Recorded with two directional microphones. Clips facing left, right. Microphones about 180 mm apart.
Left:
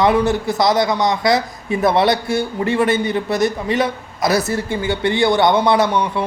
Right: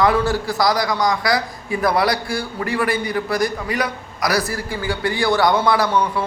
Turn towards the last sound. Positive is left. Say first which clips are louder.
# left 2 dB
turn(degrees=20)  # may be behind; listen again after turning